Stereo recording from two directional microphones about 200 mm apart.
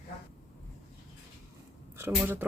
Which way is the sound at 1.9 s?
10° right (ahead or behind).